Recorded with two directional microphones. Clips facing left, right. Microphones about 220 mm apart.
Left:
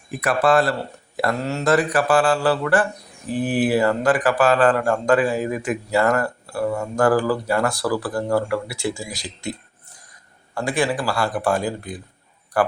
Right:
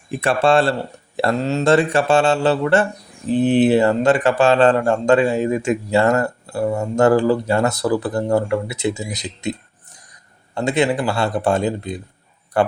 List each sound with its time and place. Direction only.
0.1 s a man's voice: 25° right (ahead or behind)